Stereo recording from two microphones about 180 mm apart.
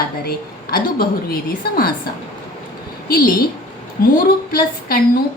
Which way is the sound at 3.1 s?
55° left (ahead or behind).